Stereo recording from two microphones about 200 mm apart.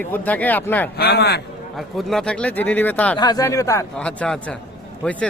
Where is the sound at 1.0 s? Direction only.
55° left (ahead or behind).